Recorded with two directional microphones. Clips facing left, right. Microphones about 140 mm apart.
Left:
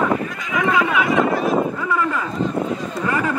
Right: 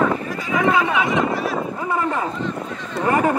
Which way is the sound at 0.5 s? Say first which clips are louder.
Right 1 dB; 30° right (ahead or behind).